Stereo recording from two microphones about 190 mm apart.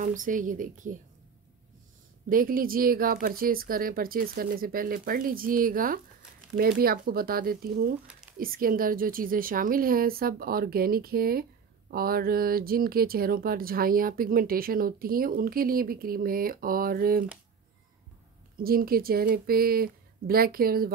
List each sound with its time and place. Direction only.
0.0 s speech: 45° right (ahead or behind)
2.2 s speech: 45° right (ahead or behind)
8.1 s a sound: 5° right (ahead or behind)
8.4 s speech: 50° right (ahead or behind)
18.6 s speech: 50° right (ahead or behind)